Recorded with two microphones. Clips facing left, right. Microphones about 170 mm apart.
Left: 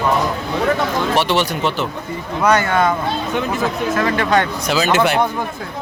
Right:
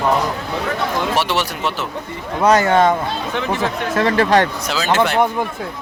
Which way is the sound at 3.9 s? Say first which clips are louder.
Right 4 dB; 30° right (ahead or behind).